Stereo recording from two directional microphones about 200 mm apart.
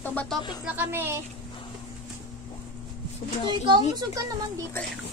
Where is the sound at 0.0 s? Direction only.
5° left (ahead or behind).